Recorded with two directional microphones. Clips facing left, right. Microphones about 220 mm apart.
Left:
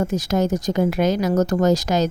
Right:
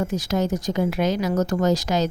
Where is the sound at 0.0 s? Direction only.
45° left (ahead or behind).